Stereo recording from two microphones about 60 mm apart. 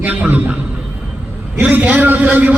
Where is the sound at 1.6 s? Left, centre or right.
Right.